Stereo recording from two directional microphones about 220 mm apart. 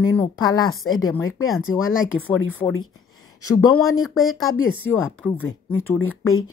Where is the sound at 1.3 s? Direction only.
70° left (ahead or behind).